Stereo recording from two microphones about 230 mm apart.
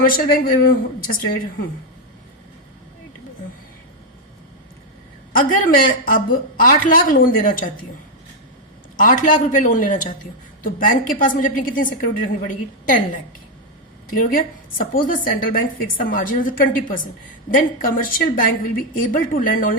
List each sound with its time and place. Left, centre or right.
0.0 s a woman's voice: left
5.3 s a woman's voice: left
9.0 s a woman's voice: left
14.1 s a woman's voice: left